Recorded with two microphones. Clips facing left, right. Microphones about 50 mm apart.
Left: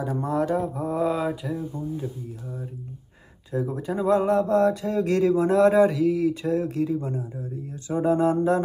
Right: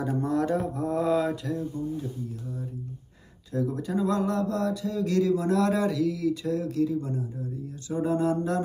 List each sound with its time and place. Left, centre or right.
0.2 s mantra: centre
1.6 s speech: left
3.5 s speech: left